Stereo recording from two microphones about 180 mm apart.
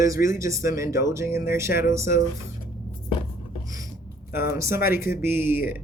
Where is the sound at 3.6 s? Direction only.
20° right (ahead or behind).